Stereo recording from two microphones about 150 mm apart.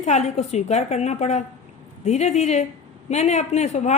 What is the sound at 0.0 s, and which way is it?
A woman's voice, 50° left (ahead or behind).